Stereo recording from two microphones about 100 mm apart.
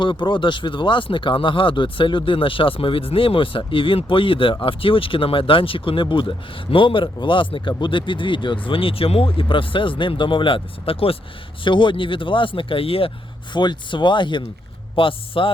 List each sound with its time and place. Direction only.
0.0 s speech: 55° left (ahead or behind)
11.6 s speech: 55° left (ahead or behind)
13.5 s speech: 50° left (ahead or behind)